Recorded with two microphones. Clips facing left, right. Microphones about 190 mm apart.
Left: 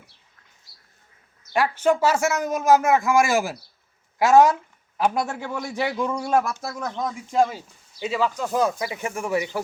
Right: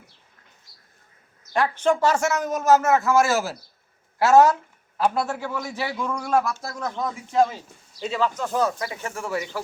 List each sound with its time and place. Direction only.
1.5 s speech: 10° left (ahead or behind)
6.2 s speech: centre (ahead or behind)
6.7 s speech: 15° left (ahead or behind)